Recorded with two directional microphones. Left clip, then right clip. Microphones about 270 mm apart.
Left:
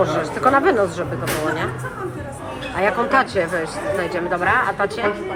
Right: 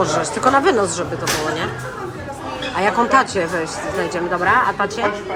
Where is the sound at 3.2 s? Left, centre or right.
Centre.